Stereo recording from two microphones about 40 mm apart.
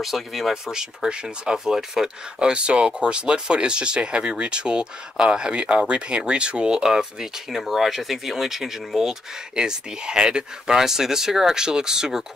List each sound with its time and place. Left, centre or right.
0.0 s speech: centre
0.7 s speech: centre
2.3 s speech: right
7.5 s speech: centre
9.6 s speech: right
10.8 s speech: centre